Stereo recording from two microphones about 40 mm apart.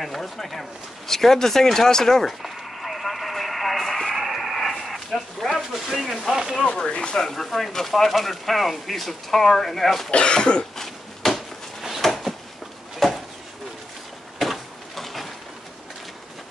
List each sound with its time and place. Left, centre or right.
0.0 s speech: centre
2.2 s radio: centre
5.7 s speech: centre
6.6 s speech: left
7.2 s speech: centre
10.1 s speech: left
11.3 s a sound: centre
14.4 s a sound: centre